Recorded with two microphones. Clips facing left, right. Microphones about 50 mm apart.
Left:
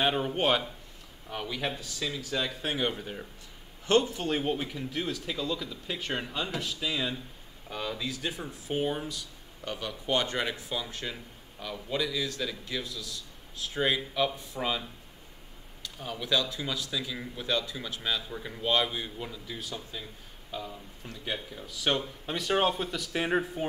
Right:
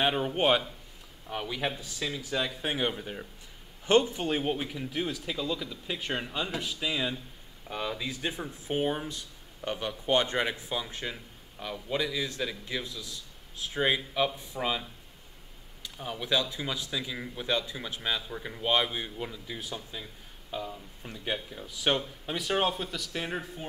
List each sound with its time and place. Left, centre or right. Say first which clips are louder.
0.0 s a man's voice: right 1 dB; centre
3.8 s speech: right 1 dB; right
4.3 s a man's voice: even; centre
18.3 s a man's voice: right 1 dB; centre
22.2 s speech: left 4 dB; centre
23.1 s speech: left 8 dB; left